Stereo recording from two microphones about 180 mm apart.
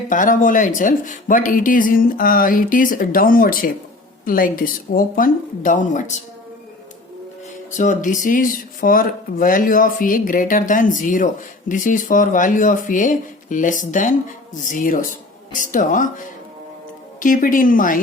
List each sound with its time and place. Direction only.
0.1 s speech: 45° left (ahead or behind)
7.8 s speech: 45° left (ahead or behind)